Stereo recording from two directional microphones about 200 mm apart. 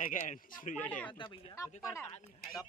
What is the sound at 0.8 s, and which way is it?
Speech, 5° left (ahead or behind).